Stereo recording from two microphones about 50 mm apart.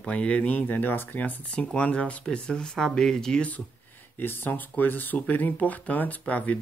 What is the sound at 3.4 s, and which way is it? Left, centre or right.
Speech, left.